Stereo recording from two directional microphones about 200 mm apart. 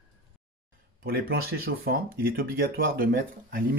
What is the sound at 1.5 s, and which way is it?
Speech, 50° right (ahead or behind).